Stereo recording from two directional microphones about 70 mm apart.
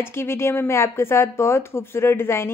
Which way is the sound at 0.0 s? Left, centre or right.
Left.